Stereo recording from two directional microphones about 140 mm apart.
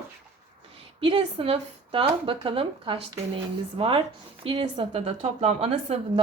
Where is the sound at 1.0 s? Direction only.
40° right (ahead or behind).